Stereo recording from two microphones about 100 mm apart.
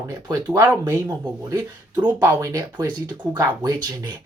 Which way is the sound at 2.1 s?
30° right (ahead or behind).